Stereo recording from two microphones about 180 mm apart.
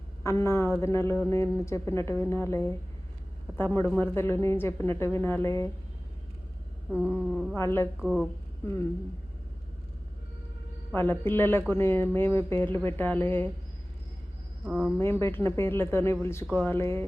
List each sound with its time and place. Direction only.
0.2 s a man's voice: 15° left (ahead or behind)
6.9 s a man's voice: 10° left (ahead or behind)
8.0 s speech: centre (ahead or behind)
8.6 s a man's voice: 15° left (ahead or behind)
10.9 s a man's voice: 10° left (ahead or behind)
14.6 s speech: centre (ahead or behind)
14.9 s a man's voice: 15° left (ahead or behind)